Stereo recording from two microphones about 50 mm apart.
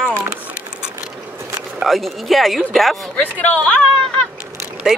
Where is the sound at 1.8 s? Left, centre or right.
Centre.